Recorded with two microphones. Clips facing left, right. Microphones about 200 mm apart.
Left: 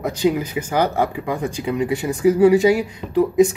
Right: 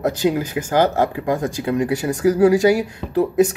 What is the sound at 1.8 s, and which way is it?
Speech, 80° right.